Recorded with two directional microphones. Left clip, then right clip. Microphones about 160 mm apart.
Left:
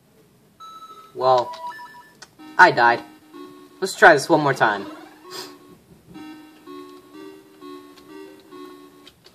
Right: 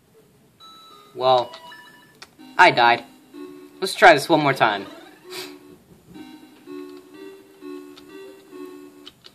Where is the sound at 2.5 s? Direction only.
10° right (ahead or behind).